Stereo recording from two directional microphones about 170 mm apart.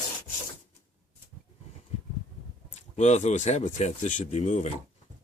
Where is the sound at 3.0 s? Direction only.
40° left (ahead or behind).